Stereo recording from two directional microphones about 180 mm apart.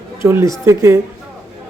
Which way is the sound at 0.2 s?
15° right (ahead or behind).